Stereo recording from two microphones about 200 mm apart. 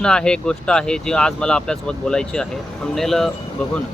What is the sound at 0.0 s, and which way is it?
Speech, 5° left (ahead or behind).